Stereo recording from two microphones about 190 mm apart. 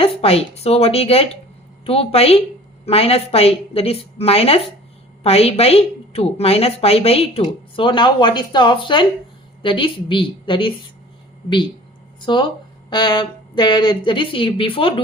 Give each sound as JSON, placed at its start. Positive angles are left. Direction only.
{"t": 0.0, "sound": "a woman's voice", "side_deg": 30}